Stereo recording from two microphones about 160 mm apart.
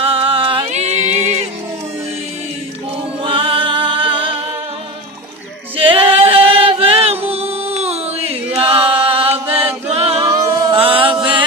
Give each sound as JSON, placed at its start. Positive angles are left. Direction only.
{"t": 0.0, "sound": "music", "side_deg": -35}
{"t": 3.2, "sound": "music", "side_deg": -30}
{"t": 5.7, "sound": "a capella", "side_deg": -35}
{"t": 8.5, "sound": "chant", "side_deg": -35}
{"t": 9.9, "sound": "a capella", "side_deg": -40}
{"t": 10.2, "sound": "music", "side_deg": -25}